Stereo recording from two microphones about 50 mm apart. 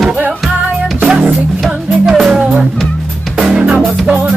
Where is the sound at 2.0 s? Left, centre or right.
Centre.